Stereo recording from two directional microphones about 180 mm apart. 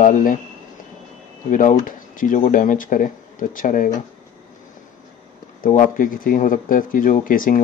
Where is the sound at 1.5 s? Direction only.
45° left (ahead or behind).